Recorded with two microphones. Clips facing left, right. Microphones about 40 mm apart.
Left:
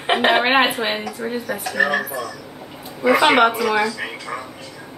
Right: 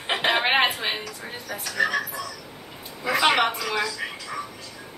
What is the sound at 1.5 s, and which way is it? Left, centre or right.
Speech, left.